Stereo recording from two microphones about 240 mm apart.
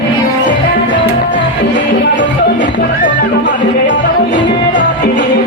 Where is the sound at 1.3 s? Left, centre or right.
Left.